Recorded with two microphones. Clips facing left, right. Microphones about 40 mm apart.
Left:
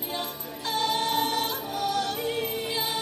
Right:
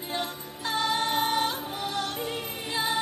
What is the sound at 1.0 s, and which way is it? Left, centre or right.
Music, right.